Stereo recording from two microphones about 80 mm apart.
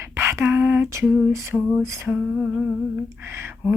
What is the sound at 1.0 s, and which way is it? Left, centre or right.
Humming, centre.